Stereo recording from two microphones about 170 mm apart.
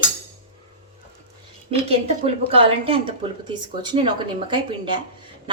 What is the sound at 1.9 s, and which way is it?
A woman's voice, 35° right (ahead or behind).